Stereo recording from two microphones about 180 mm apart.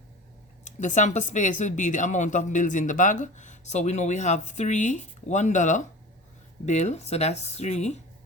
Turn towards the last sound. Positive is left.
turn(degrees=40)  # may be behind; listen again after turning